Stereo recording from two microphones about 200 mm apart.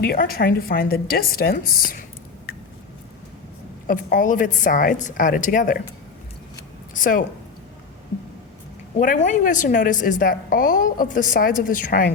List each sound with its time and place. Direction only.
0.0 s a woman's voice: 50° left (ahead or behind)
3.8 s a woman's voice: 40° left (ahead or behind)
6.9 s a woman's voice: 40° left (ahead or behind)
9.0 s a woman's voice: 40° left (ahead or behind)